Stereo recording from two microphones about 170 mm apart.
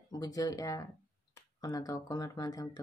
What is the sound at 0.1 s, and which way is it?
Speech, 20° left (ahead or behind).